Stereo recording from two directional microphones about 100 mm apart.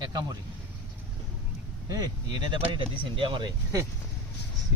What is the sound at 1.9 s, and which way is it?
Speech, 45° right (ahead or behind).